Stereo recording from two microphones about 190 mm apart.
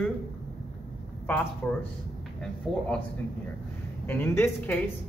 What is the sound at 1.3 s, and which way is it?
Speech, 10° left (ahead or behind).